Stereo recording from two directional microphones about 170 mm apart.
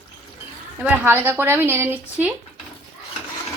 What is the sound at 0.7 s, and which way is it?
Speech, 10° right (ahead or behind).